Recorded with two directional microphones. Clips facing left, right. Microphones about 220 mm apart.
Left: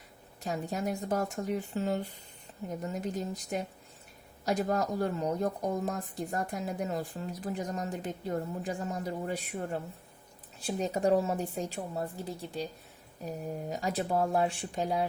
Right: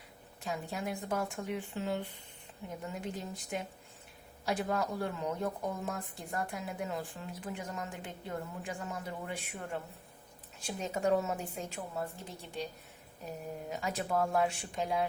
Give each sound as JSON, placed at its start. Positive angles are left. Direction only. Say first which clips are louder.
{"t": 0.4, "sound": "speech", "louder": "left 4 dB", "side_deg": 40}